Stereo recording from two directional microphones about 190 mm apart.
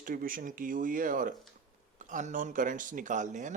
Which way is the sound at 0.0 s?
50° right (ahead or behind).